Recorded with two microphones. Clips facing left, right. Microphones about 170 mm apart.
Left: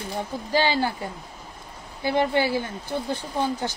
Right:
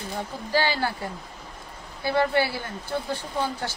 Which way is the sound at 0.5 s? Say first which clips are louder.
Left 2 dB; 20° left (ahead or behind).